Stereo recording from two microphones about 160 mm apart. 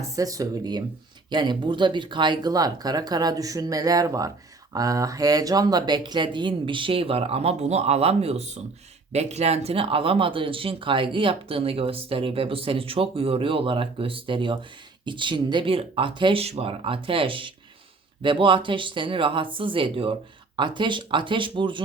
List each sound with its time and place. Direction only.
0.2 s speech: 20° right (ahead or behind)